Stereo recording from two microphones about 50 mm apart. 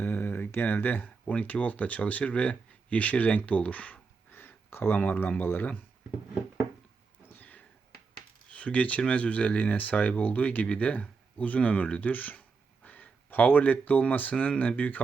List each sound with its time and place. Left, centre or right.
0.0 s a sound: left
1.0 s speech: left
4.4 s a sound: left
4.9 s speech: left
7.3 s sniff: left
8.5 s speech: left